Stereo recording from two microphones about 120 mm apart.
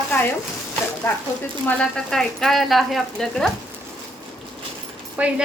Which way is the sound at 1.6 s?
10° left (ahead or behind).